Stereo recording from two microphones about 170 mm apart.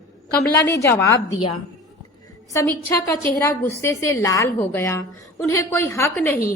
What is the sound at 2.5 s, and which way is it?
A woman's voice, 15° left (ahead or behind).